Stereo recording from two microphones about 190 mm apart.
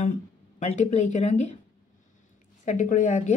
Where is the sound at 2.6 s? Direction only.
40° left (ahead or behind).